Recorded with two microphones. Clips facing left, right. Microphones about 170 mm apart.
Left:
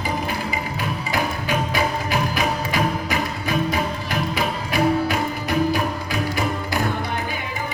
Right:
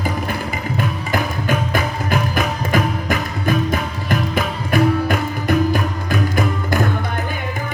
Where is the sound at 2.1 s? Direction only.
50° right (ahead or behind).